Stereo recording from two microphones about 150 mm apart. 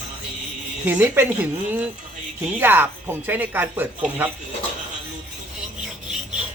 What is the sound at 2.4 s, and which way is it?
Speech, 15° right (ahead or behind).